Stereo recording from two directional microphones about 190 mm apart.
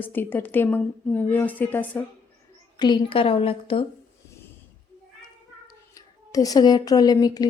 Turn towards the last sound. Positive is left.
turn(degrees=20)  # may be behind; listen again after turning